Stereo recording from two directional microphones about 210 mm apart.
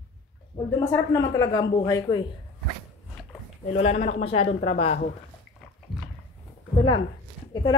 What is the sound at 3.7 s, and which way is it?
Speech, 30° left (ahead or behind).